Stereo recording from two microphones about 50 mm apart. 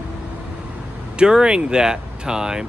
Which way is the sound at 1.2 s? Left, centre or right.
Centre.